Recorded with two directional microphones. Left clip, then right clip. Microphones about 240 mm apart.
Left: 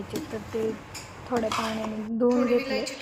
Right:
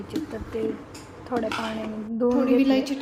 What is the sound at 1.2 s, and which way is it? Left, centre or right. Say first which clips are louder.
Speech: even; centre.